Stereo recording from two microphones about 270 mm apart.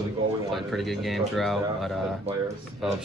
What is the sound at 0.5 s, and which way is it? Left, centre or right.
Speech, centre.